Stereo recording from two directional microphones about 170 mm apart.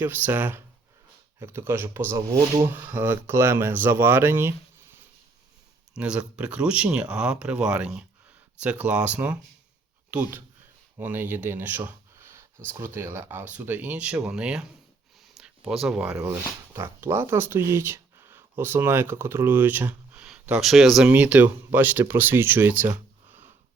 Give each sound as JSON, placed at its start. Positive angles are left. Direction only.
{"t": 0.0, "sound": "speech", "side_deg": -10}
{"t": 5.9, "sound": "speech", "side_deg": -5}